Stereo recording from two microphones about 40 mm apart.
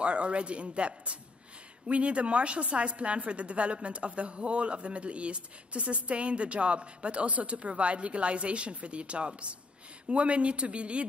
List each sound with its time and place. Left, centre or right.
0.0 s a woman's voice: right